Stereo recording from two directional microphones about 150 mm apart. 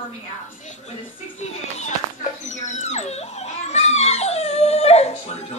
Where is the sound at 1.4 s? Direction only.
50° left (ahead or behind).